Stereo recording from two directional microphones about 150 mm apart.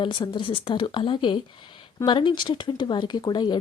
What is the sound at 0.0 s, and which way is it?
A woman's voice, 30° left (ahead or behind).